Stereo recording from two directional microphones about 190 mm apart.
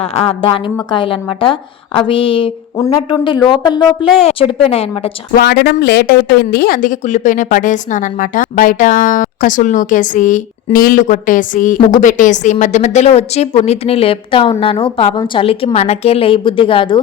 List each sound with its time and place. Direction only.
0.0 s a woman's voice: 30° left (ahead or behind)
5.3 s a woman's voice: 60° left (ahead or behind); by 17.0 s 25° left (ahead or behind)